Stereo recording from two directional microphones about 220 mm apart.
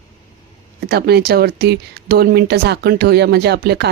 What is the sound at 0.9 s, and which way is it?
Speech, 45° right (ahead or behind).